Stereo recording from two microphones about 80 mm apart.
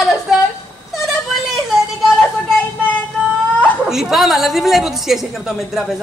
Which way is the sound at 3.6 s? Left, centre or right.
Centre.